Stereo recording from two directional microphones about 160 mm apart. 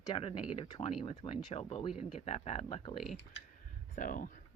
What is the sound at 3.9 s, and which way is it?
Speech, 60° left (ahead or behind).